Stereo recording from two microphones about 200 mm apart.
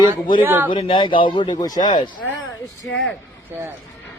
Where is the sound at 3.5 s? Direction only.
10° right (ahead or behind).